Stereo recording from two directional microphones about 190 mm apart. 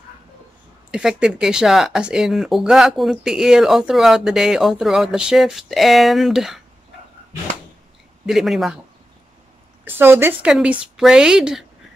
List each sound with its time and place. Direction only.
0.9 s speech: 5° right (ahead or behind)
8.3 s speech: centre (ahead or behind)
9.8 s speech: 10° right (ahead or behind)